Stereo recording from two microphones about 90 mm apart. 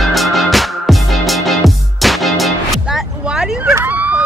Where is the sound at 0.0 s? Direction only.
Centre (ahead or behind).